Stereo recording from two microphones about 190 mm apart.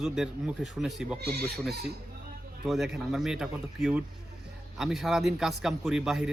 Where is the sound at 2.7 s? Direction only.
Centre (ahead or behind).